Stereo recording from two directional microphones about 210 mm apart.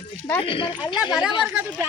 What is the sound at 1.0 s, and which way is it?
Speech, centre (ahead or behind).